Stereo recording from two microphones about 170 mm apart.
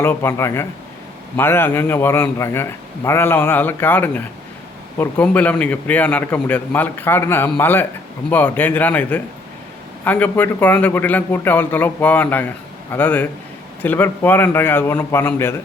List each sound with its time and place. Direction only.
0.0 s a man's voice: 15° left (ahead or behind)